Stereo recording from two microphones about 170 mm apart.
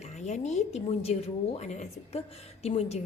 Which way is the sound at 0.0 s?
45° left (ahead or behind).